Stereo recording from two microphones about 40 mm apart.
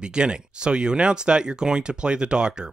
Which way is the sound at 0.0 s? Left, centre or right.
Right.